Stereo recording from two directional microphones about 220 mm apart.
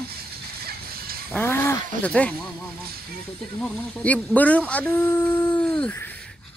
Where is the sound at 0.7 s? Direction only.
45° right (ahead or behind).